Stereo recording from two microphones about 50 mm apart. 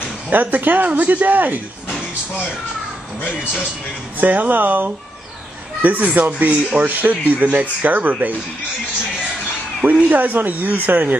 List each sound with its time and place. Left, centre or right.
0.3 s speech: right
4.2 s speech: right
10.0 s speech: right